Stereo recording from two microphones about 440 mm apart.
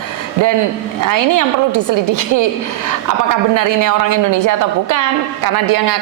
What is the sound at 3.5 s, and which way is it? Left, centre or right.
A woman's voice, right.